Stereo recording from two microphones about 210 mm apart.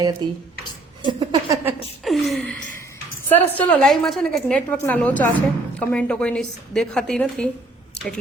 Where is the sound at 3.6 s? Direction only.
5° left (ahead or behind).